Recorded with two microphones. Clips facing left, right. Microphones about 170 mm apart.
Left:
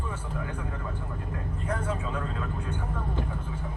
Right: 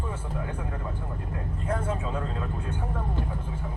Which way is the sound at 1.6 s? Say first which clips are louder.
Right 2 dB; 30° right (ahead or behind).